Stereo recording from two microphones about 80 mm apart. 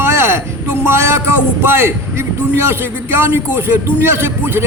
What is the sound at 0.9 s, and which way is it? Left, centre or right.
Speech, right.